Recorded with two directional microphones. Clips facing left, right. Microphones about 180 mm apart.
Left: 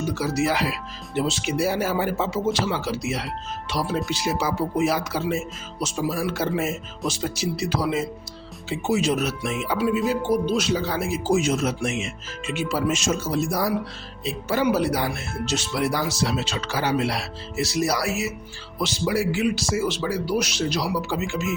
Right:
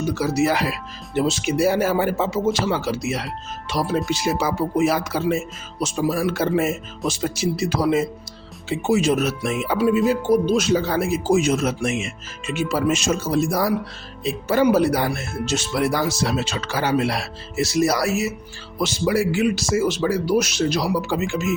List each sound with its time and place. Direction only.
0.1 s speech: 45° right (ahead or behind); by 13.7 s 60° right (ahead or behind)
14.3 s speech: 45° right (ahead or behind)